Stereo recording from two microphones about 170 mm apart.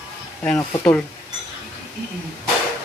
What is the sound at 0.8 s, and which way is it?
Speech, 5° left (ahead or behind).